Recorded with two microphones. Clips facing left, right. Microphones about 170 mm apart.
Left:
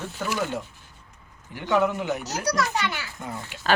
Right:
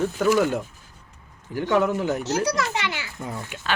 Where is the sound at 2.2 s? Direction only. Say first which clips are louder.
Right 3 dB; 25° right (ahead or behind).